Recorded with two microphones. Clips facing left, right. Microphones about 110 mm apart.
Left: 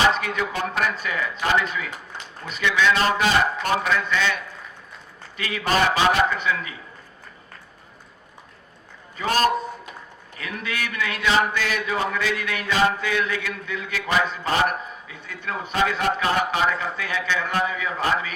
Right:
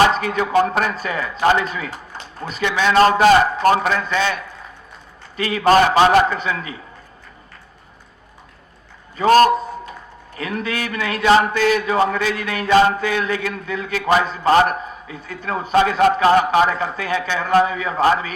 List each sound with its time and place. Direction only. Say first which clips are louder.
0.1 s speech: right 7 dB; 40° right (ahead or behind)
5.4 s speech: right 8 dB; 40° right (ahead or behind)
10.3 s speech: right 6 dB; 40° right (ahead or behind)